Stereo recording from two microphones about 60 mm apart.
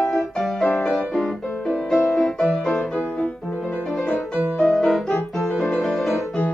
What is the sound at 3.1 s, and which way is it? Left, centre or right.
Music, centre.